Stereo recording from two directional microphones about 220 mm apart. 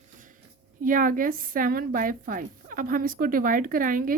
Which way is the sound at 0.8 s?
40° right (ahead or behind).